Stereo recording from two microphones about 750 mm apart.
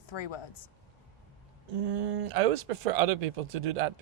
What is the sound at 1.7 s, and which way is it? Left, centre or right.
Speech, right.